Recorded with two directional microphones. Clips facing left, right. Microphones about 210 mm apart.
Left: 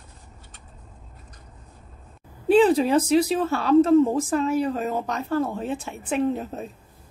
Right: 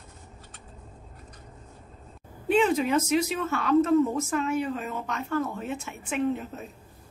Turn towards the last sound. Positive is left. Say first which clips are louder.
# left 4 dB
turn(degrees=35)  # may be behind; listen again after turning